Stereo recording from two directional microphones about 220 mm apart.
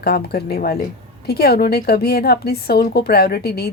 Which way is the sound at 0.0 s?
45° left (ahead or behind).